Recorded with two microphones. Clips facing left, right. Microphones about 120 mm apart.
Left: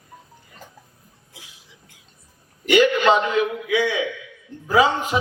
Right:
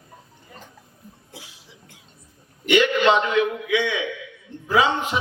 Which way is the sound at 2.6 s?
40° left (ahead or behind).